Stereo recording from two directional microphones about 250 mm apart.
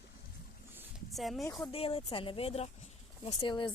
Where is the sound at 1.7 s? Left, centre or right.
Left.